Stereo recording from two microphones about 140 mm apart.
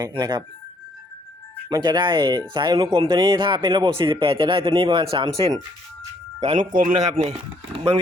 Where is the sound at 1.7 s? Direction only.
30° right (ahead or behind).